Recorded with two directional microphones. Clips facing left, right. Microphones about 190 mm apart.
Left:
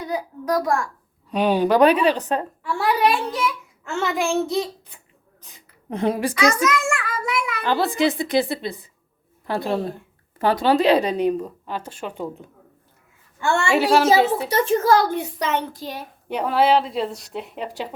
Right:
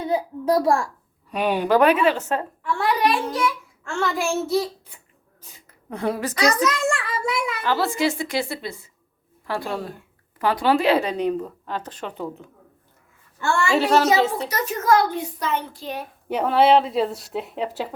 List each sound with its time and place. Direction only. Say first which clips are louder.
0.0 s a child's voice: right 4 dB; 25° right (ahead or behind)
1.3 s a woman's voice: left 3 dB; 5° right (ahead or behind)
1.6 s a woman's voice: left 1 dB; 15° left (ahead or behind)
3.8 s a woman's voice: left 1 dB; 5° left (ahead or behind)
5.9 s a woman's voice: left 3 dB; 20° left (ahead or behind)
6.4 s a sound: even; 30° right (ahead or behind)
7.6 s a woman's voice: left 3 dB; 20° left (ahead or behind)
13.7 s a woman's voice: left 2 dB; 10° left (ahead or behind)
14.5 s a child's voice: left 3 dB; 30° left (ahead or behind)
15.1 s a child's voice: left 2 dB; 75° left (ahead or behind)
16.3 s a woman's voice: right 2 dB; centre (ahead or behind)